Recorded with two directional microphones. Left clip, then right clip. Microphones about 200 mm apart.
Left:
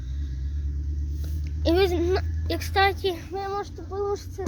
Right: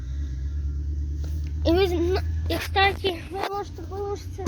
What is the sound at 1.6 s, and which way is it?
Speech, 5° left (ahead or behind).